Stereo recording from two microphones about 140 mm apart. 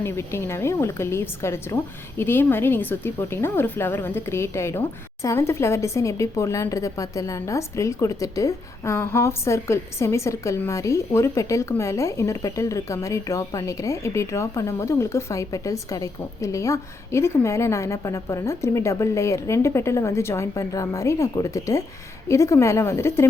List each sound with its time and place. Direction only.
0.0 s a woman's voice: 20° left (ahead or behind)